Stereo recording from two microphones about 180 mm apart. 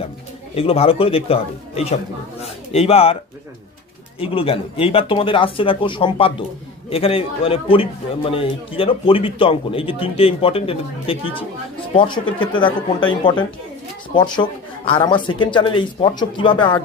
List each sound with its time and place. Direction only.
0.5 s a man's voice: 30° left (ahead or behind)
4.2 s a man's voice: 30° left (ahead or behind)